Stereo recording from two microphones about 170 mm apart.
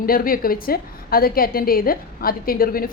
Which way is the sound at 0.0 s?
60° left (ahead or behind).